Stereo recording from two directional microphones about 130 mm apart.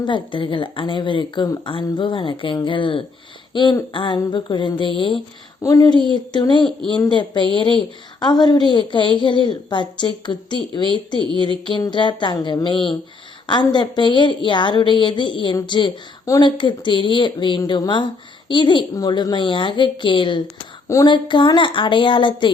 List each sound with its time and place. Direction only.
0.0 s speech: 40° left (ahead or behind)
5.6 s speech: 25° left (ahead or behind)
11.2 s speech: 40° right (ahead or behind)
11.8 s speech: 35° left (ahead or behind)
20.8 s speech: 25° left (ahead or behind)
21.1 s speech: 40° left (ahead or behind)